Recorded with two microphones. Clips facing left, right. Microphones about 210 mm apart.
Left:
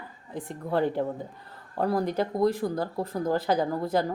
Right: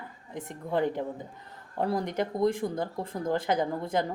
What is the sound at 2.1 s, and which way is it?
Speech, 20° right (ahead or behind).